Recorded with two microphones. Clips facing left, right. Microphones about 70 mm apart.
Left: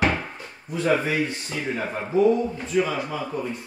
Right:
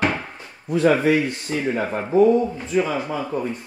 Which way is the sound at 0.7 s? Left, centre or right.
Right.